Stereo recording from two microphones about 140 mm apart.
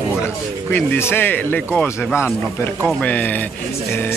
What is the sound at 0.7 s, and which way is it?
Speech, 15° left (ahead or behind).